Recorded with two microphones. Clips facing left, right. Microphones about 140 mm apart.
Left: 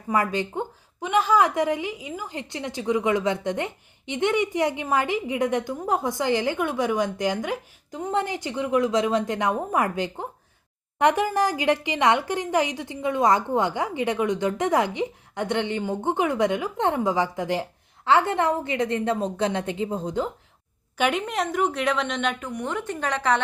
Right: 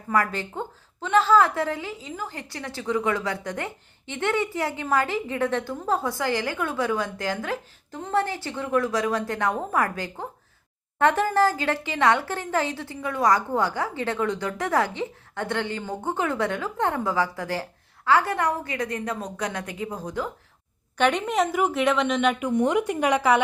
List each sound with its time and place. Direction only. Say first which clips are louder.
0.1 s a woman's voice: left 1 dB; 20° left (ahead or behind)
21.0 s a woman's voice: right 2 dB; 5° left (ahead or behind)
22.5 s a woman's voice: right 7 dB; 15° right (ahead or behind)